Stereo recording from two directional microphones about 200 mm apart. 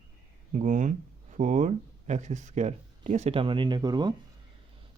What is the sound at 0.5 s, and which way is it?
Speech, 40° right (ahead or behind).